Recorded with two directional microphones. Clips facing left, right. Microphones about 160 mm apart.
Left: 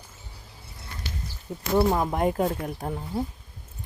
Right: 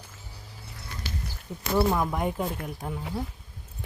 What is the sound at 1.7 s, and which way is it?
Speech, 25° left (ahead or behind).